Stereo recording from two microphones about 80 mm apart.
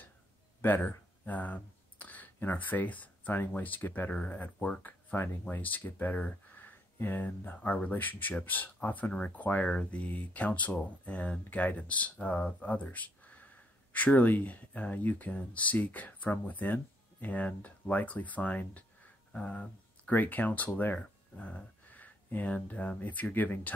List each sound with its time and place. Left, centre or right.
0.6 s speech: left